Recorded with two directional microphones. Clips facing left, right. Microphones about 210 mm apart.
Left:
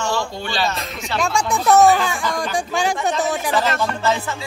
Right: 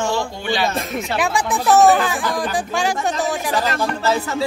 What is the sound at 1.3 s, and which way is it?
Speech, 5° right (ahead or behind).